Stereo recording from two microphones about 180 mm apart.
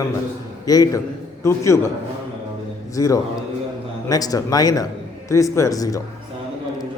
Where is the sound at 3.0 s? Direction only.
20° left (ahead or behind).